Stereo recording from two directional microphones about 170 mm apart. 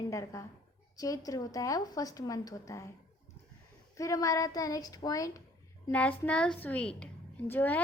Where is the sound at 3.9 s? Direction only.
20° left (ahead or behind).